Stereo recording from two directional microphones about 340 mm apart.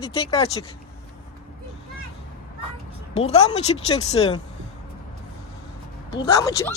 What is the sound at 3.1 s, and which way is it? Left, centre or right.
Speech, centre.